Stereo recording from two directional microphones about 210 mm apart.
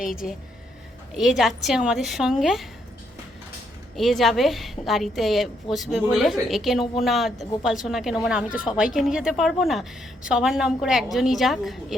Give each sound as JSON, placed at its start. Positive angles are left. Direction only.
{"t": 0.0, "sound": "a woman's voice", "side_deg": 0}
{"t": 3.9, "sound": "a woman's voice", "side_deg": 0}